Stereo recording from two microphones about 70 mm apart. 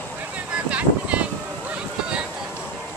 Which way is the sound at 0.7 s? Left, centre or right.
Centre.